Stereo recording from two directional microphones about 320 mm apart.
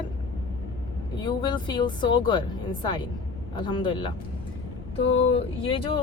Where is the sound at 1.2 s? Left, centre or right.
Centre.